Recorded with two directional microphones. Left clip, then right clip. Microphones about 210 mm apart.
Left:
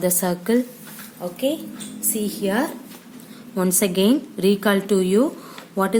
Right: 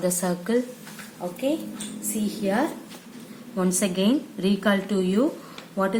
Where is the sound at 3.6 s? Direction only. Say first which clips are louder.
Left 5 dB; 50° left (ahead or behind).